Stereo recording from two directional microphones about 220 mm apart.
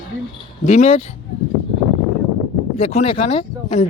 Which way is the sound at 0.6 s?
30° left (ahead or behind).